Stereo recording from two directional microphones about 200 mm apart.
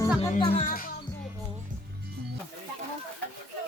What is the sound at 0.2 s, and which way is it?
Music, 30° left (ahead or behind).